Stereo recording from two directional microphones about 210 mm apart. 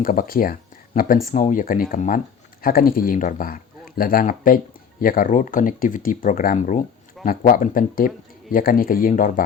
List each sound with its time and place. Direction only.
0.0 s speech: 40° left (ahead or behind)